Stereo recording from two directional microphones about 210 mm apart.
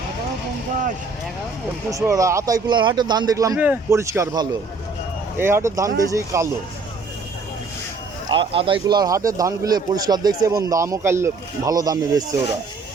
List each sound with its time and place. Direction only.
1.9 s speech: 15° right (ahead or behind)
8.3 s speech: 25° right (ahead or behind)